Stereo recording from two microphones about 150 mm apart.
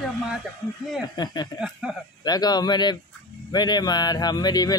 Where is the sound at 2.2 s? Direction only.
25° left (ahead or behind).